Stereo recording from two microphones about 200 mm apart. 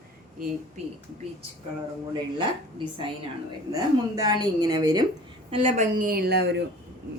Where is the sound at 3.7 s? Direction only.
20° right (ahead or behind).